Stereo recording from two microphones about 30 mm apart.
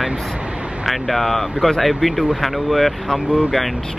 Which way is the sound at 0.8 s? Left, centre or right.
Centre.